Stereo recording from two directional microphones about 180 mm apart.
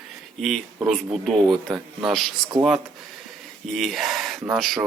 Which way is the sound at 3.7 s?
Centre (ahead or behind).